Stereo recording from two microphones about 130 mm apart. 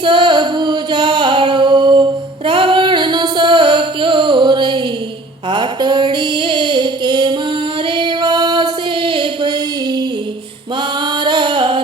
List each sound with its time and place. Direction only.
0.0 s music: 40° right (ahead or behind)
2.5 s singing: 40° right (ahead or behind)
5.5 s mantra: 35° right (ahead or behind)
7.9 s music: 40° right (ahead or behind)
11.2 s a sound: 35° right (ahead or behind)